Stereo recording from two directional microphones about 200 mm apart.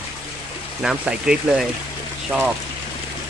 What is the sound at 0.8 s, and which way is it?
Speech, 5° right (ahead or behind).